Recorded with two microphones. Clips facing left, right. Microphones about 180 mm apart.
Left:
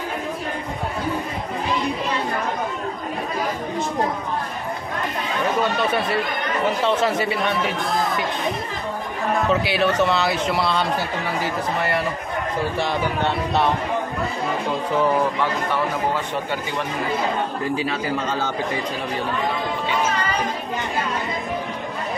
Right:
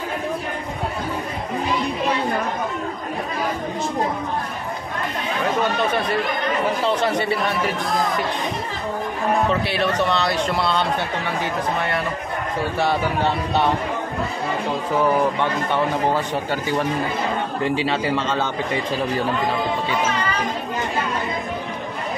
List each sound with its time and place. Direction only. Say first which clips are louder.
7.0 s a man's voice: even; 5° left (ahead or behind)
9.5 s a man's voice: left 1 dB; centre (ahead or behind)
17.7 s speech: right 3 dB; 25° right (ahead or behind)